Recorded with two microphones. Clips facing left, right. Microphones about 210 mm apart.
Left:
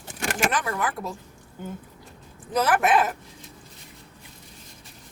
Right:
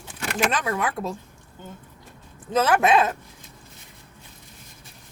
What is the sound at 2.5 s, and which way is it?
Speech, 25° right (ahead or behind).